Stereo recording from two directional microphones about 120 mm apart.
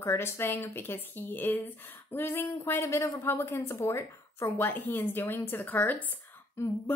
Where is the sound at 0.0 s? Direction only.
20° left (ahead or behind).